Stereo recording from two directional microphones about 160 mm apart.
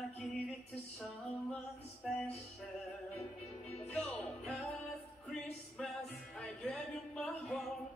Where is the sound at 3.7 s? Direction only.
10° left (ahead or behind).